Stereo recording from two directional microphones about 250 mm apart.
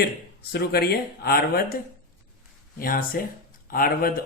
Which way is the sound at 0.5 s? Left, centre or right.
Left.